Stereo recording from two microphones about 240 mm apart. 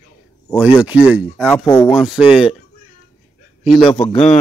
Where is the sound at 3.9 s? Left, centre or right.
Centre.